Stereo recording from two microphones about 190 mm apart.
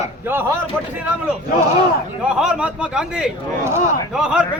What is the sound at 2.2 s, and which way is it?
A man's voice, 5° right (ahead or behind).